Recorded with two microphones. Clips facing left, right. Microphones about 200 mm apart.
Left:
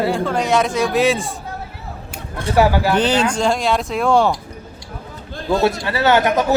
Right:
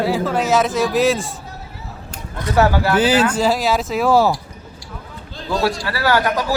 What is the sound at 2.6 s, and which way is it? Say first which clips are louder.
Speech: left 1 dB; 15° left (ahead or behind).